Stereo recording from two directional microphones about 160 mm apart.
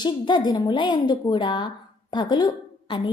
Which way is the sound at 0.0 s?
25° left (ahead or behind).